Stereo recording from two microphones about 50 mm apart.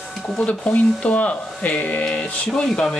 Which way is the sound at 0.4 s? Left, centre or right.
Left.